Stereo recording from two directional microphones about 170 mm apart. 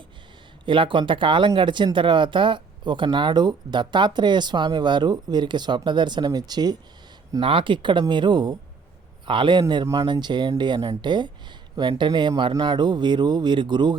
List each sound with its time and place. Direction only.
0.6 s speech: 30° right (ahead or behind)